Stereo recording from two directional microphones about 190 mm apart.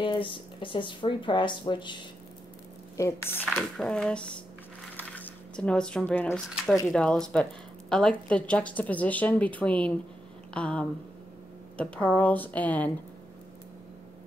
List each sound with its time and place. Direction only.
0.0 s speech: 25° left (ahead or behind)
3.0 s speech: 15° left (ahead or behind)
4.9 s a sound: 10° left (ahead or behind)
6.5 s speech: 5° right (ahead or behind)
10.5 s a sound: 5° left (ahead or behind)
11.7 s speech: 5° left (ahead or behind)